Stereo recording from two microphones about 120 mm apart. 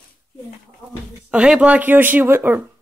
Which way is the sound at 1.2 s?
10° right (ahead or behind).